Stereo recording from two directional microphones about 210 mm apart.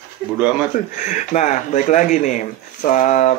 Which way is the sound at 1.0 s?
35° left (ahead or behind).